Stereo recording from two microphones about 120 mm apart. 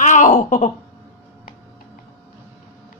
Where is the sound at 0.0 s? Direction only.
90° left.